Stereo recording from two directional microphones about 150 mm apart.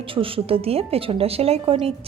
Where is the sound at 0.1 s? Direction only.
35° right (ahead or behind).